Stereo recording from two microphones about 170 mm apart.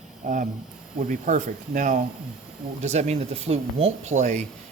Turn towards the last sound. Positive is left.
turn(degrees=-45)  # may be behind; listen again after turning